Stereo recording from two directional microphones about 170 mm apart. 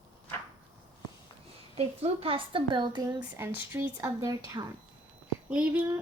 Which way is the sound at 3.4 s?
15° right (ahead or behind).